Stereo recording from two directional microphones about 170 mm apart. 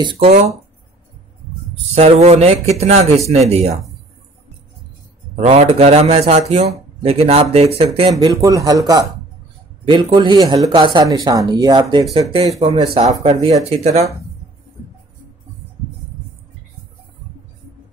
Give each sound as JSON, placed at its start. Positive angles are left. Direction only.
{"t": 1.9, "sound": "speech", "side_deg": -40}
{"t": 5.3, "sound": "speech", "side_deg": -40}
{"t": 8.1, "sound": "speech", "side_deg": -20}
{"t": 13.1, "sound": "speech", "side_deg": -20}
{"t": 13.7, "sound": "speech", "side_deg": -40}